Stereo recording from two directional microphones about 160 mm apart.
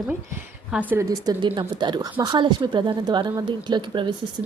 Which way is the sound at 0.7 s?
10° right (ahead or behind).